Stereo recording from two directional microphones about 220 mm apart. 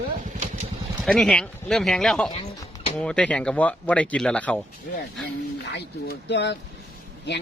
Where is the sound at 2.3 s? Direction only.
25° left (ahead or behind).